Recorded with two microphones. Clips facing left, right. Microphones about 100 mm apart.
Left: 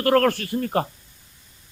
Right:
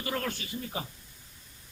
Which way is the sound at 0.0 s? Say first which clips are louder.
Left 15 dB; 70° left (ahead or behind).